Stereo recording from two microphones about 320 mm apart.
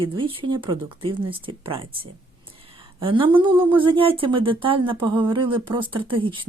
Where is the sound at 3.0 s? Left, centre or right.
Centre.